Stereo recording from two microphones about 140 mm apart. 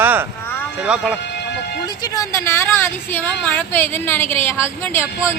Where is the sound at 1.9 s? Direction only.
30° left (ahead or behind).